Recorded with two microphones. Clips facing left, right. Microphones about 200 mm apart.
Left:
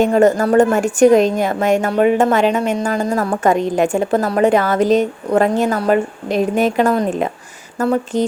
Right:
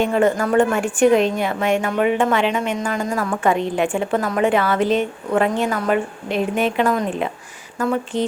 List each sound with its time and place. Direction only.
0.0 s a woman's voice: 40° left (ahead or behind)